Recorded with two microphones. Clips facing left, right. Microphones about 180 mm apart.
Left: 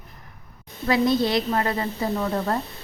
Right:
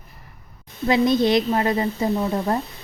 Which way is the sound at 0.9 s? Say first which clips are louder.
Right 3 dB; 20° right (ahead or behind).